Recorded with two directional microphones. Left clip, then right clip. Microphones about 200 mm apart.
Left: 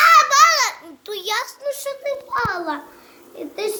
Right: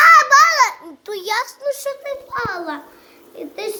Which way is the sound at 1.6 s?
25° right (ahead or behind).